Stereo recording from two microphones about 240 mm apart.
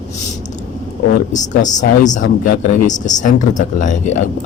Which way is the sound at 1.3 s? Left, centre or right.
Left.